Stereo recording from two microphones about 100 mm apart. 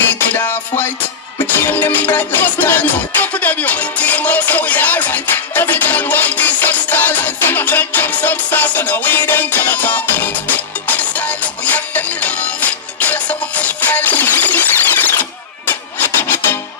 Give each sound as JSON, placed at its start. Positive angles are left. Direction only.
{"t": 0.1, "sound": "music", "side_deg": 20}